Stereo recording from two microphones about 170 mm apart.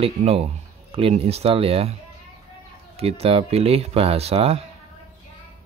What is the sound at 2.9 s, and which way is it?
Speech, 35° right (ahead or behind).